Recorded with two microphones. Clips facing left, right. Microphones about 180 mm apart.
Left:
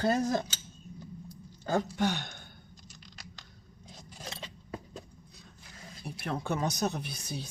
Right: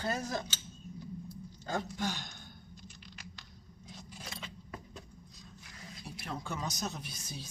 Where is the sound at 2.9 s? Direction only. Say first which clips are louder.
Right 1 dB; 40° left (ahead or behind).